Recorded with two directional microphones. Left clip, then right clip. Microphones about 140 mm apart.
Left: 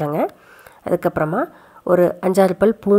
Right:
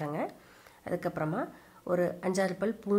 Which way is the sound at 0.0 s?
50° left (ahead or behind).